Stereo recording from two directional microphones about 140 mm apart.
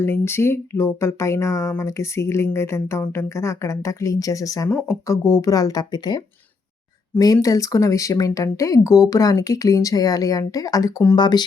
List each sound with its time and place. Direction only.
0.0 s speech: 15° left (ahead or behind)